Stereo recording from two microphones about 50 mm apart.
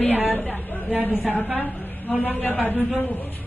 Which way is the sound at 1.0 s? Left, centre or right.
Left.